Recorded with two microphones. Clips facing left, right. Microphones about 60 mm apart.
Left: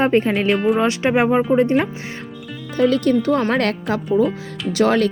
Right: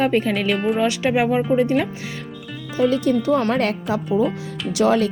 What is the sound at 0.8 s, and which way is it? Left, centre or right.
Speech, left.